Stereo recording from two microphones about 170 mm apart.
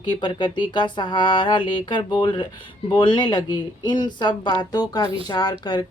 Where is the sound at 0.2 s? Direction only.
30° left (ahead or behind).